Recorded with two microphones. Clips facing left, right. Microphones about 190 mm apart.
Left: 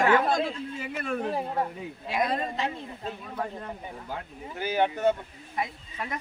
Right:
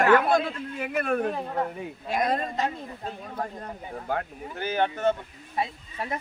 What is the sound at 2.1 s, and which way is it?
Speech, 45° right (ahead or behind).